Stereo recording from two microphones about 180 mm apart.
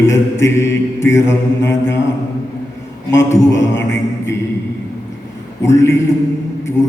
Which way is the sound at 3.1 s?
15° left (ahead or behind).